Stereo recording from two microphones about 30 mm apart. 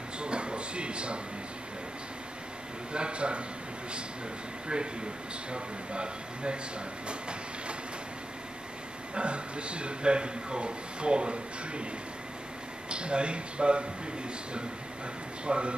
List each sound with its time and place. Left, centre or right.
0.2 s a sound: right
2.9 s speech: right
5.5 s speech: right
7.1 s train: right
9.1 s speech: right
12.9 s speech: right
15.4 s speech: right